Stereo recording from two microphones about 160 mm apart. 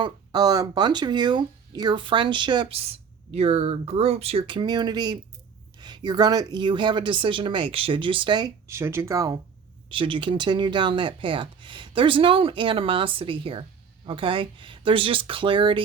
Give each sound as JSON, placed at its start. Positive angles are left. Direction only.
{"t": 0.0, "sound": "speech", "side_deg": -25}
{"t": 9.9, "sound": "speech", "side_deg": -30}